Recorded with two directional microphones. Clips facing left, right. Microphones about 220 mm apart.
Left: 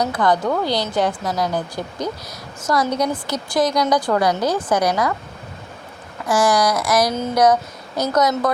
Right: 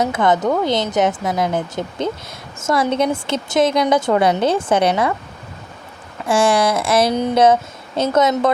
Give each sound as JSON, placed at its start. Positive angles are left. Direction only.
{"t": 0.0, "sound": "a woman's voice", "side_deg": -25}
{"t": 6.2, "sound": "a woman's voice", "side_deg": -30}